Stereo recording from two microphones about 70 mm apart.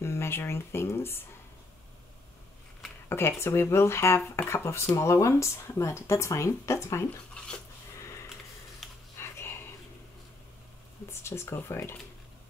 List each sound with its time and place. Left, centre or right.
0.0 s speech: left
3.1 s speech: left
9.2 s dog: left
11.1 s speech: left